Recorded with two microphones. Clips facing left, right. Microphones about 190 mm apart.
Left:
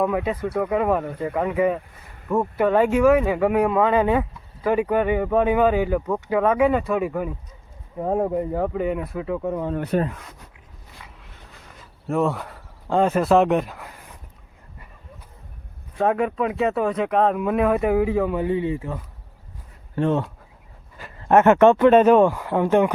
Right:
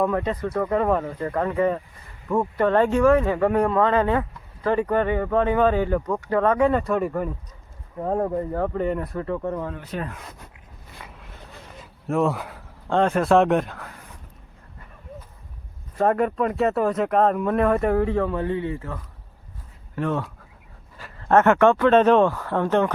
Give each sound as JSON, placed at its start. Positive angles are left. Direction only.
{"t": 0.0, "sound": "speech", "side_deg": 5}
{"t": 9.7, "sound": "speech", "side_deg": 55}
{"t": 11.0, "sound": "a sound", "side_deg": -55}
{"t": 12.0, "sound": "speech", "side_deg": 0}
{"t": 16.0, "sound": "speech", "side_deg": 0}